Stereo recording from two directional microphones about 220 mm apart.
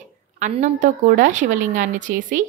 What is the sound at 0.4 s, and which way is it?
A woman's voice, 35° right (ahead or behind).